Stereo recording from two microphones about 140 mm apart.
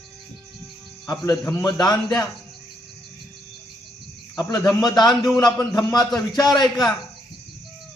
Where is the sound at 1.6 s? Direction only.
30° left (ahead or behind).